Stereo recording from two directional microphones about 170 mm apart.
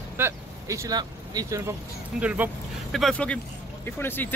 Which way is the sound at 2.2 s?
10° right (ahead or behind).